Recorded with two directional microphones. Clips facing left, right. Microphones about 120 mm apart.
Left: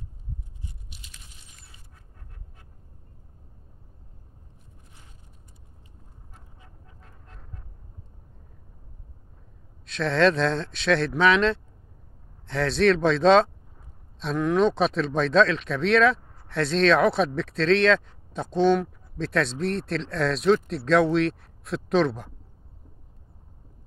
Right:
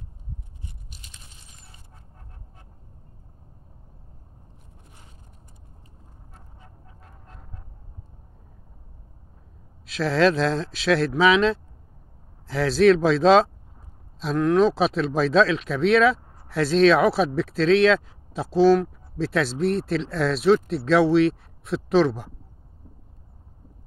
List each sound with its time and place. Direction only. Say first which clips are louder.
9.8 s speech: right 1 dB; 5° right (ahead or behind)